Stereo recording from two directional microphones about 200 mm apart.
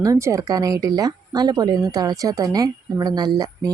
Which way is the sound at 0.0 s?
15° right (ahead or behind).